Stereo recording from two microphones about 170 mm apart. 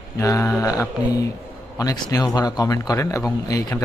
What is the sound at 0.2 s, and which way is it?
Speech, 15° left (ahead or behind).